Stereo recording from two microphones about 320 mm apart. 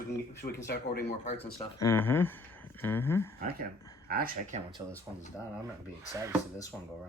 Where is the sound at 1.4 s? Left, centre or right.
Centre.